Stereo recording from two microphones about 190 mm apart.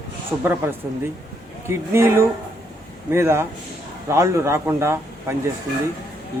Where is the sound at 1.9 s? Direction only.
15° right (ahead or behind).